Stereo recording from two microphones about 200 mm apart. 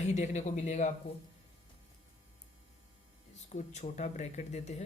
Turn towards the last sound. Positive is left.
turn(degrees=35)  # may be behind; listen again after turning